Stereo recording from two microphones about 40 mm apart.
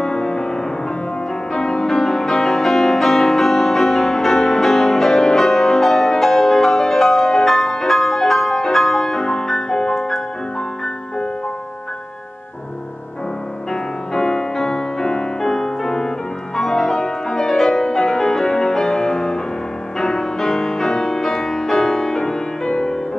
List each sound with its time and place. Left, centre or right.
0.0 s music: centre
13.7 s music: centre